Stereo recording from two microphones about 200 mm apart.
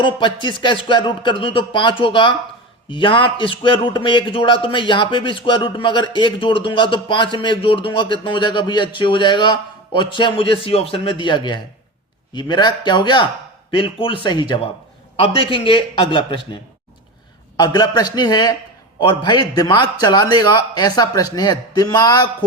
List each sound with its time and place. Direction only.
0.0 s a man's voice: 25° left (ahead or behind)
17.6 s a man's voice: 20° left (ahead or behind)